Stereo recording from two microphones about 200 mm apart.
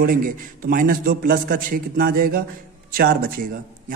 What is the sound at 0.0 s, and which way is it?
A man's voice, 45° right (ahead or behind).